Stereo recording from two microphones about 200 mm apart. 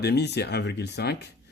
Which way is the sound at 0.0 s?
55° left (ahead or behind).